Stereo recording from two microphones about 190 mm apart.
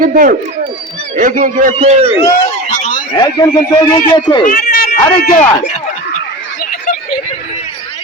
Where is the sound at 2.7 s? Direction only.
40° left (ahead or behind).